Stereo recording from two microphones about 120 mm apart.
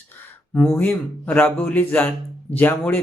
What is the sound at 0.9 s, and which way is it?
Speech, 10° left (ahead or behind).